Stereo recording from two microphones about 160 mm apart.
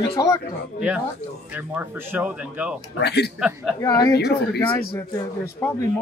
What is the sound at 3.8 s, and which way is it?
Speech, 20° left (ahead or behind).